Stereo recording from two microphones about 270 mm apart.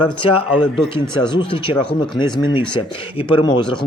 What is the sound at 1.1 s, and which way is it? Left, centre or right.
Speech, centre.